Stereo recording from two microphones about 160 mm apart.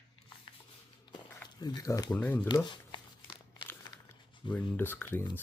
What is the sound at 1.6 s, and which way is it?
Speech, 25° left (ahead or behind).